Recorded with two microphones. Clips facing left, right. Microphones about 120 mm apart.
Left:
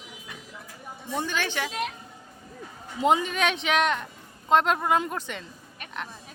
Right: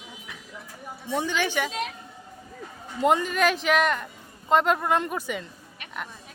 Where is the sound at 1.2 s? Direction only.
15° right (ahead or behind).